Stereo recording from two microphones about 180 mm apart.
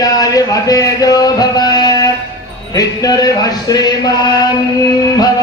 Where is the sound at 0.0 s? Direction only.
20° left (ahead or behind).